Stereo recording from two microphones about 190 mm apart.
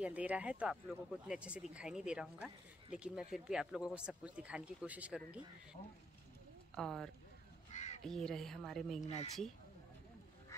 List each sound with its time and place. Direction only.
0.0 s speech: 5° right (ahead or behind)
7.7 s crow: 35° left (ahead or behind)
8.0 s speech: centre (ahead or behind)
9.0 s speech: 35° left (ahead or behind)